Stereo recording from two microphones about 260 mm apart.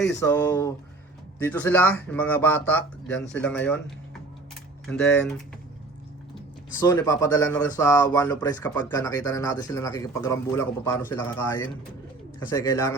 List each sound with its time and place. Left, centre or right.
0.2 s speech: centre
6.7 s speech: centre